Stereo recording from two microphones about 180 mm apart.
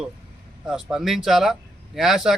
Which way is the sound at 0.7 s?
5° right (ahead or behind).